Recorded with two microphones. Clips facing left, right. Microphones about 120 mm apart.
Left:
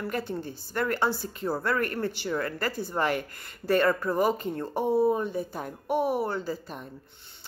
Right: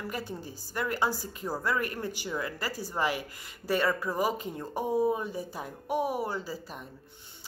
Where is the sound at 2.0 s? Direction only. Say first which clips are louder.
Left 4 dB; 60° left (ahead or behind).